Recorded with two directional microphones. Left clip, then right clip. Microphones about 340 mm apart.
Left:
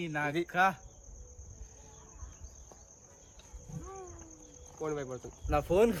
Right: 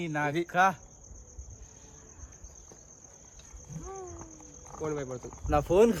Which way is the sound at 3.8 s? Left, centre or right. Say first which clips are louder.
Right 5 dB; centre.